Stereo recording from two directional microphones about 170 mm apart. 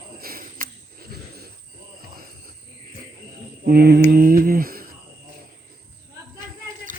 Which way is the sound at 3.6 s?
65° right (ahead or behind).